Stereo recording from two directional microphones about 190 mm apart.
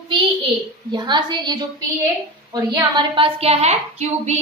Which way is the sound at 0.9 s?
25° right (ahead or behind).